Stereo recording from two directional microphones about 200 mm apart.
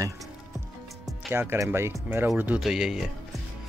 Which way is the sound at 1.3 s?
10° right (ahead or behind).